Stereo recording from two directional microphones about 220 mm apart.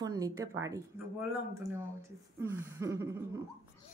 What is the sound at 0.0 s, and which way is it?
Speech, 15° right (ahead or behind).